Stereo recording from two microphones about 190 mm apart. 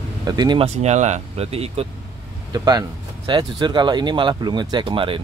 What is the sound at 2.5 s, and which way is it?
Speech, 20° right (ahead or behind).